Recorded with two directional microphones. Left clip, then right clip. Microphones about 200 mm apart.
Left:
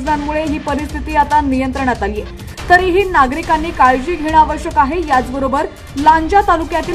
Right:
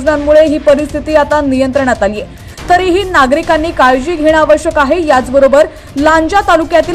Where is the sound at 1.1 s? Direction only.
15° right (ahead or behind).